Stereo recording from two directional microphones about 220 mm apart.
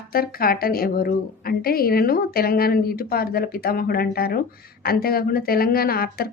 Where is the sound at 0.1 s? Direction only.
40° left (ahead or behind).